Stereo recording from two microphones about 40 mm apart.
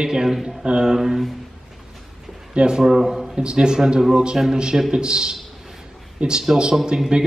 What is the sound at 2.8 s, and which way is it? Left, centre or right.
Speech, centre.